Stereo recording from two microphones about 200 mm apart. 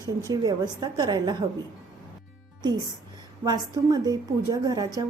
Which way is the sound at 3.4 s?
20° right (ahead or behind).